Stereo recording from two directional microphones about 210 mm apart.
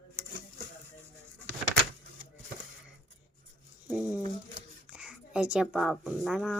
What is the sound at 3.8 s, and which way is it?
A woman's voice, 5° right (ahead or behind).